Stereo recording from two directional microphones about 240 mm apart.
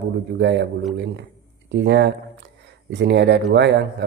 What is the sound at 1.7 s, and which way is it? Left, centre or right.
Speech, right.